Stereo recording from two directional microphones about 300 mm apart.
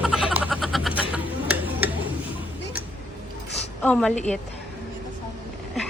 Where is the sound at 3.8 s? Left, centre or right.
Centre.